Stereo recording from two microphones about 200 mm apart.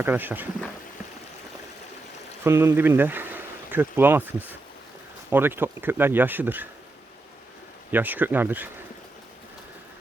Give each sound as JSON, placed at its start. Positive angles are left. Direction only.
{"t": 0.0, "sound": "speech", "side_deg": -10}
{"t": 2.4, "sound": "speech", "side_deg": -10}
{"t": 7.9, "sound": "speech", "side_deg": -10}